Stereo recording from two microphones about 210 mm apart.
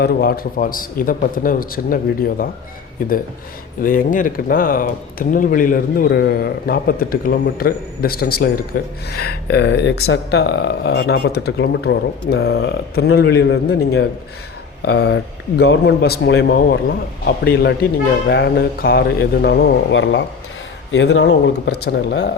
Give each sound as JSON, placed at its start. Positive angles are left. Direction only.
{"t": 0.0, "sound": "speech", "side_deg": 45}
{"t": 3.0, "sound": "speech", "side_deg": 45}